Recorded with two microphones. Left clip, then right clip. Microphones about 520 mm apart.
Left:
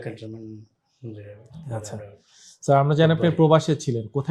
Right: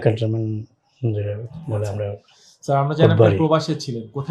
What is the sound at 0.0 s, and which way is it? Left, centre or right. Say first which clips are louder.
Speech: right 15 dB; right.